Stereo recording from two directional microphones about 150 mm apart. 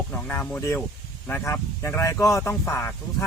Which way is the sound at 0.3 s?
15° left (ahead or behind).